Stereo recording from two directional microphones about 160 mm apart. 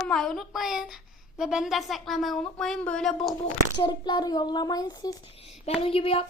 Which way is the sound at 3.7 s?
30° left (ahead or behind).